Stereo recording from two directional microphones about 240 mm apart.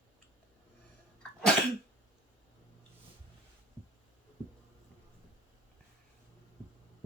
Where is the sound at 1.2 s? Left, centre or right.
Centre.